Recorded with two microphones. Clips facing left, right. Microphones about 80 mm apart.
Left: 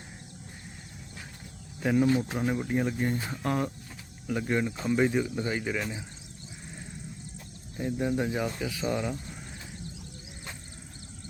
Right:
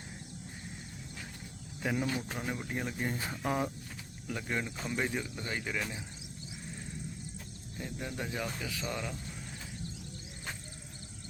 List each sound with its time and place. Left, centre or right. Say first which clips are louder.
1.8 s speech: left 9 dB; centre
7.8 s speech: left 11 dB; left
8.4 s speech: left 7 dB; centre